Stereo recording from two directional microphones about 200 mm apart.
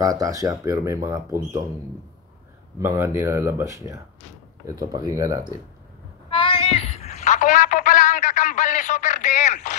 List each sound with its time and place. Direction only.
0.0 s speech: 15° right (ahead or behind)
2.8 s speech: 15° right (ahead or behind)
6.3 s a sound: 25° left (ahead or behind)